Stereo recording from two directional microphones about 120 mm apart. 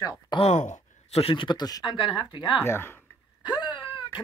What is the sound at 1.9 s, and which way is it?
Speech, 45° left (ahead or behind).